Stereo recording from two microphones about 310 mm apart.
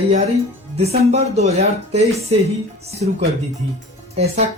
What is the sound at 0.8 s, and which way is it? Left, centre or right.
Speech, centre.